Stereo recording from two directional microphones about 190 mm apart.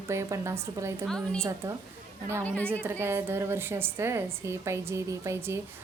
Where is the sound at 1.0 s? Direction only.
5° left (ahead or behind).